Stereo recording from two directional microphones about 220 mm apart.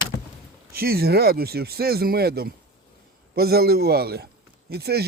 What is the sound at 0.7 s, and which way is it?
Speech, 45° right (ahead or behind).